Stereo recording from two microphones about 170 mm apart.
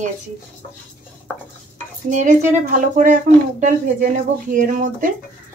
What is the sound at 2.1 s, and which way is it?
Speech, 45° right (ahead or behind).